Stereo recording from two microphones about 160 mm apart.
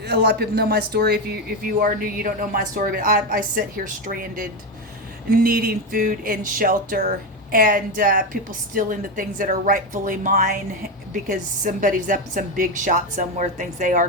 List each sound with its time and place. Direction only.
0.0 s speech: 90° right; by 14.1 s 50° right (ahead or behind)